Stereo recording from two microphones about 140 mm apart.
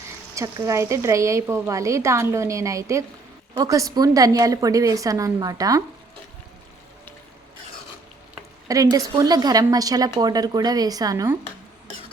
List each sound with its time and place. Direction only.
0.3 s a woman's voice: 20° right (ahead or behind)
8.6 s a woman's voice: 25° right (ahead or behind)